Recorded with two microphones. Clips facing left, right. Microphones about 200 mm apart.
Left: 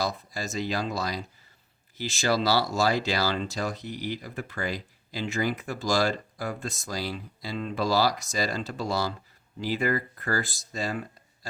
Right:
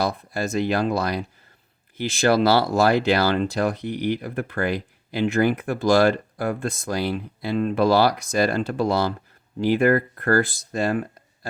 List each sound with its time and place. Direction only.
0.0 s speech: 60° right (ahead or behind)